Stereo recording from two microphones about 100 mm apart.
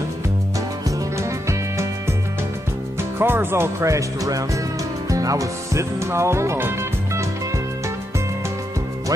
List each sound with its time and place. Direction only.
0.8 s music: 30° right (ahead or behind)
3.0 s speech: 20° right (ahead or behind)
5.1 s music: 35° right (ahead or behind)